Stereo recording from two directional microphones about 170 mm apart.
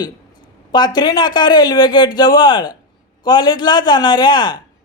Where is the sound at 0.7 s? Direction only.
25° left (ahead or behind).